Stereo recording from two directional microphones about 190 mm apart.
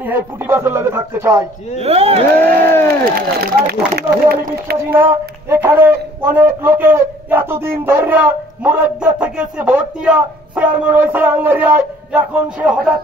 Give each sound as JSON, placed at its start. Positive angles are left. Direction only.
{"t": 0.0, "sound": "speech", "side_deg": -10}
{"t": 1.8, "sound": "speech", "side_deg": -30}
{"t": 2.4, "sound": "a sound", "side_deg": 10}
{"t": 2.9, "sound": "speech", "side_deg": -50}
{"t": 4.9, "sound": "speech", "side_deg": -10}